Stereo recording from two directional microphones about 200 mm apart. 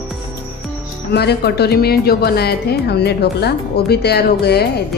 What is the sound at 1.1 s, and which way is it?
A woman's voice, 55° left (ahead or behind).